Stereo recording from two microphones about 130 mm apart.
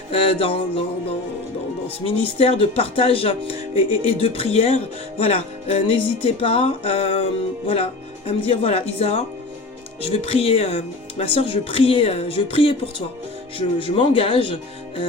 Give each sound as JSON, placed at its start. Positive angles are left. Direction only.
{"t": 0.1, "sound": "speech", "side_deg": 45}
{"t": 2.0, "sound": "speech", "side_deg": 50}
{"t": 8.3, "sound": "speech", "side_deg": 50}